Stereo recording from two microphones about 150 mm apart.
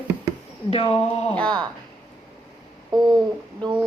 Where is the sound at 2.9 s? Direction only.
30° right (ahead or behind).